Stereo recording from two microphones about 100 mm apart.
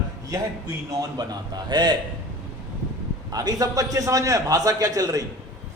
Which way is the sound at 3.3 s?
40° right (ahead or behind).